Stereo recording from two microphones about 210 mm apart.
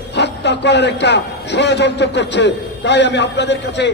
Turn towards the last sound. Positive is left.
turn(degrees=55)  # may be behind; listen again after turning